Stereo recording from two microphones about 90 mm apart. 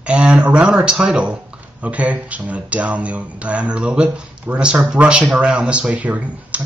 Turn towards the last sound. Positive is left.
turn(degrees=-15)  # may be behind; listen again after turning